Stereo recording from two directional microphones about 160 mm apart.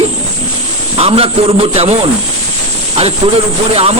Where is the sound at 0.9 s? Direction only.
40° right (ahead or behind).